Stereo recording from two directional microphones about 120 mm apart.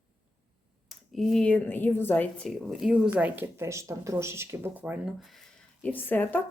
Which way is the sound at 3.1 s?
15° right (ahead or behind).